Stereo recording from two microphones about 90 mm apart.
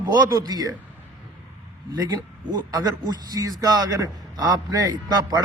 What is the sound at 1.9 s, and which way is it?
Speech, 45° right (ahead or behind).